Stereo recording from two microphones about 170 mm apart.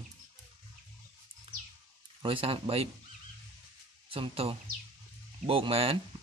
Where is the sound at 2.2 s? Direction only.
30° right (ahead or behind).